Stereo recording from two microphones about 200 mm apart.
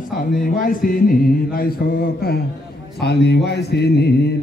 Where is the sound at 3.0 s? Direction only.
55° left (ahead or behind).